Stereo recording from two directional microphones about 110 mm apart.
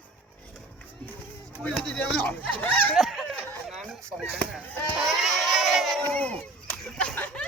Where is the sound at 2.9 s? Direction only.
Centre (ahead or behind).